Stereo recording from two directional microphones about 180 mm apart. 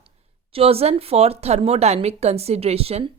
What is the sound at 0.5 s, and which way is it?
Speech, 35° right (ahead or behind).